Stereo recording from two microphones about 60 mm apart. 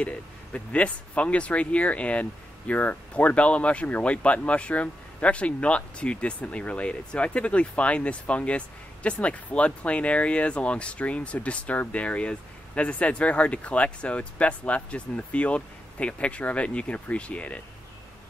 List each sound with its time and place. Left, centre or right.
0.0 s speech: left